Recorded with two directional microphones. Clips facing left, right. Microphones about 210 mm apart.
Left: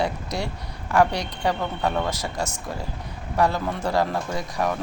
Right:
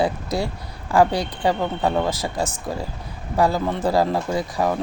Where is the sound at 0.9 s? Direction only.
30° right (ahead or behind).